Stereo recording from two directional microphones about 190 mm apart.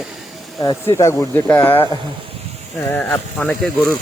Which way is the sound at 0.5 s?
20° left (ahead or behind).